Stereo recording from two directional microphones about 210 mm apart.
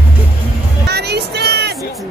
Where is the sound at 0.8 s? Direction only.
50° right (ahead or behind).